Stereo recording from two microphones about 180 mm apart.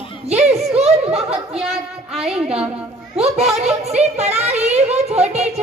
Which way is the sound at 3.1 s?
35° right (ahead or behind).